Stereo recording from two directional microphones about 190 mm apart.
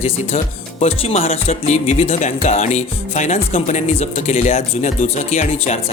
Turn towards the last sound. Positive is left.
turn(degrees=40)  # may be behind; listen again after turning